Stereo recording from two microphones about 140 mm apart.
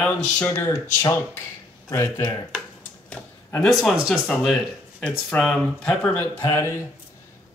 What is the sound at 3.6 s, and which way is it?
Speech, centre (ahead or behind).